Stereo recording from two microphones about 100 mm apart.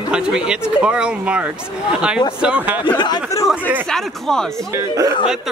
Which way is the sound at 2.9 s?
45° left (ahead or behind).